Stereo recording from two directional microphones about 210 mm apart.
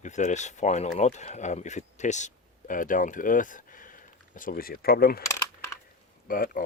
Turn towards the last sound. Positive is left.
turn(degrees=40)  # may be behind; listen again after turning